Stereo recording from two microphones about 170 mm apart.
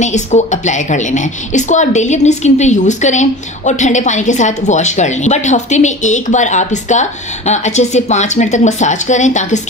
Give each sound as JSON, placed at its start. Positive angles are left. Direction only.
{"t": 0.0, "sound": "a woman's voice", "side_deg": 45}